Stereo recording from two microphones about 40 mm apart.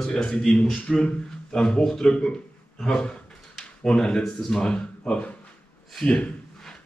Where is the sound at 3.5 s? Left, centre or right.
Centre.